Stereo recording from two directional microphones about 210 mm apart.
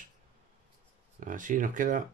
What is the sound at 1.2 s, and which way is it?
Speech, 40° right (ahead or behind).